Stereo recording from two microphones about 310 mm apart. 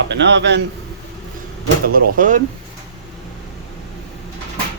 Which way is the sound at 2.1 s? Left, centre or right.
Right.